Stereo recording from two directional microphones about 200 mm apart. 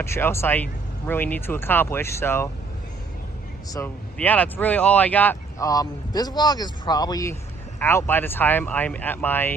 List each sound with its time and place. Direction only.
0.0 s speech: 10° left (ahead or behind)
3.7 s speech: 10° left (ahead or behind)